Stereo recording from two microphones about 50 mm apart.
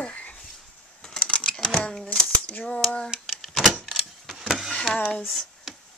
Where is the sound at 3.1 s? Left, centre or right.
Centre.